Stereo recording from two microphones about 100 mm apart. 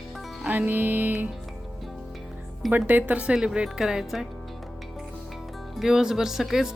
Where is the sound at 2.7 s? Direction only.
20° right (ahead or behind).